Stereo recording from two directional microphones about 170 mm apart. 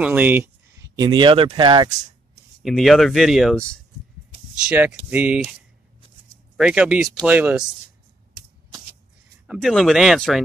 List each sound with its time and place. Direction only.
0.0 s speech: 10° right (ahead or behind)
0.9 s speech: 25° right (ahead or behind)
2.6 s speech: centre (ahead or behind)
4.6 s speech: 10° right (ahead or behind)
9.5 s speech: centre (ahead or behind)